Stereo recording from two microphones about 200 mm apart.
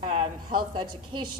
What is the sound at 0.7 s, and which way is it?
Speech, 20° right (ahead or behind).